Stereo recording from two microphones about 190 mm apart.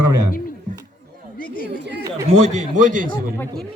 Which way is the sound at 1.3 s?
50° left (ahead or behind).